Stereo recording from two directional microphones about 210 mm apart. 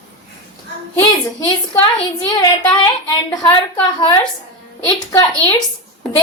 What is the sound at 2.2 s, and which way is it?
A woman's voice, 15° left (ahead or behind).